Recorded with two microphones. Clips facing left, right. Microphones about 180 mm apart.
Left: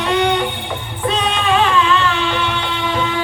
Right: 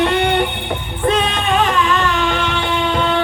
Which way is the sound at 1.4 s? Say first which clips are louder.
Left 3 dB; 50° right (ahead or behind).